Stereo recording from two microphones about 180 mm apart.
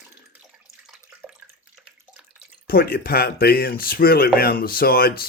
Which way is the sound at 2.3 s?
55° left (ahead or behind).